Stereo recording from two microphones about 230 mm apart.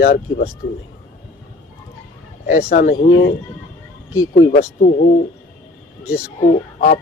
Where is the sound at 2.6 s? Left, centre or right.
Left.